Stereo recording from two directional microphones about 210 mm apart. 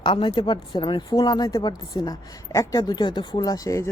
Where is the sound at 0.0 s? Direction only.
20° left (ahead or behind).